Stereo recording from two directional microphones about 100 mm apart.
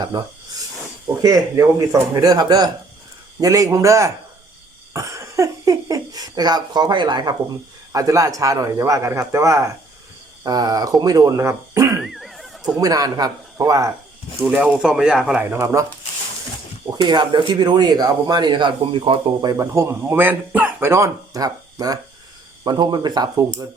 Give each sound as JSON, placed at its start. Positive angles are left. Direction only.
{"t": 0.0, "sound": "speech", "side_deg": -40}
{"t": 7.9, "sound": "speech", "side_deg": -35}
{"t": 12.0, "sound": "neigh", "side_deg": 0}
{"t": 12.8, "sound": "speech", "side_deg": -40}
{"t": 14.4, "sound": "speech", "side_deg": -15}
{"t": 14.8, "sound": "speech", "side_deg": -5}
{"t": 15.4, "sound": "speech", "side_deg": -25}
{"t": 17.0, "sound": "speech", "side_deg": -50}
{"t": 19.5, "sound": "speech", "side_deg": -30}